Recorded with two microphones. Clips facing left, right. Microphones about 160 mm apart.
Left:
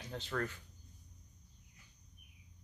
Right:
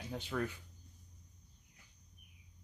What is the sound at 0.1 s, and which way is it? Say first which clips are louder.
Speech: right 1 dB; 10° right (ahead or behind).